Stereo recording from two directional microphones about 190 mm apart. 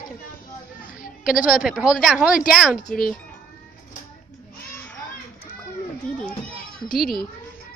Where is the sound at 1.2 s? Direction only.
5° right (ahead or behind).